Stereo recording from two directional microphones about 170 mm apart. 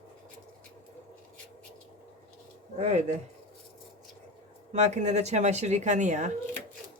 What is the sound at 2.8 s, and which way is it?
Speech, 40° right (ahead or behind).